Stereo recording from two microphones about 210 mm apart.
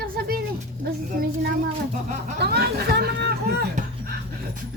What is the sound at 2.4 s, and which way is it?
Chatter, 50° right (ahead or behind).